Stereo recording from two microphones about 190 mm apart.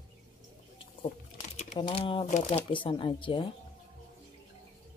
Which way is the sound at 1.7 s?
30° left (ahead or behind).